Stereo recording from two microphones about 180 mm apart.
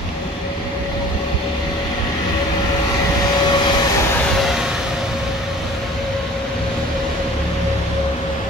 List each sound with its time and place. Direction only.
3.4 s vehicle: 25° left (ahead or behind)